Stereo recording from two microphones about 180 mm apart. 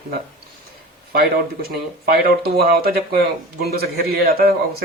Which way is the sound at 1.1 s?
55° right (ahead or behind).